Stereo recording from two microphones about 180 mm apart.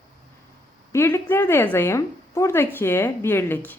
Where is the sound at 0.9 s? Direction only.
15° left (ahead or behind).